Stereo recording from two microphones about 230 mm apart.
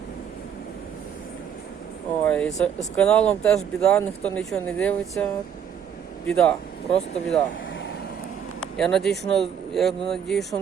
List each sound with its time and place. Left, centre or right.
2.2 s speech: centre
6.2 s speech: centre
8.8 s speech: centre